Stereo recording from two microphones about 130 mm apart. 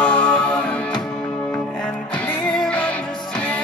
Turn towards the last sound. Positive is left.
turn(degrees=10)  # may be behind; listen again after turning